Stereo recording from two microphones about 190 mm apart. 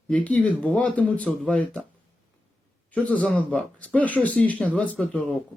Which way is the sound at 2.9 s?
5° left (ahead or behind).